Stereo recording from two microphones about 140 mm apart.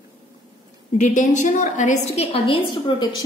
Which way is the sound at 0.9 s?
60° left (ahead or behind).